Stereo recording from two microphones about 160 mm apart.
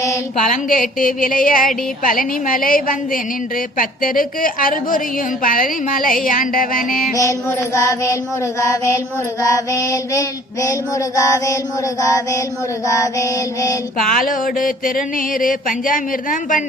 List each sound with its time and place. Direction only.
0.5 s a woman's voice: 60° left (ahead or behind)
7.2 s mantra: 20° left (ahead or behind)
14.1 s a woman's voice: 60° left (ahead or behind)